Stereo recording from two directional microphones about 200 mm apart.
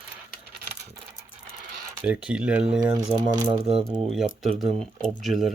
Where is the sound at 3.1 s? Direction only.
20° right (ahead or behind).